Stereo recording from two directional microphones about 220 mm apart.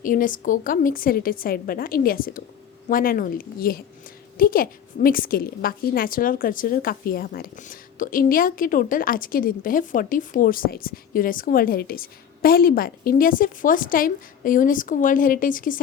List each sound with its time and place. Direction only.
0.0 s a woman's voice: 40° left (ahead or behind)